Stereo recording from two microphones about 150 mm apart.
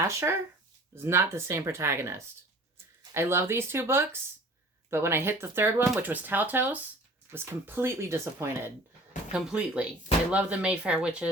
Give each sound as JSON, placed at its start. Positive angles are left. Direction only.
{"t": 0.1, "sound": "speech", "side_deg": -20}
{"t": 9.3, "sound": "speech", "side_deg": -5}